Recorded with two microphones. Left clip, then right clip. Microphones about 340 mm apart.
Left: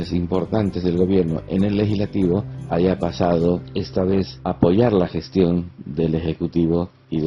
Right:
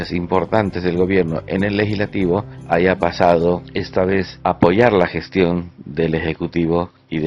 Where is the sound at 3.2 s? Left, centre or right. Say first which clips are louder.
Right 5 dB; right.